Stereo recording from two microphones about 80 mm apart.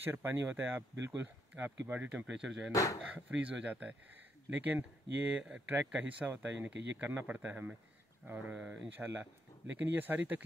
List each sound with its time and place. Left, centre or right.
0.0 s speech: right; by 2.7 s centre
2.7 s speech: left
3.3 s speech: centre